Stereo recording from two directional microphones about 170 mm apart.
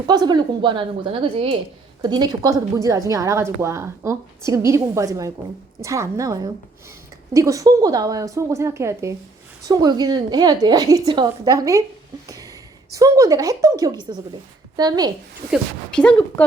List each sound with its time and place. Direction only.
0.1 s a woman's voice: 25° right (ahead or behind)
15.9 s speech: 5° left (ahead or behind)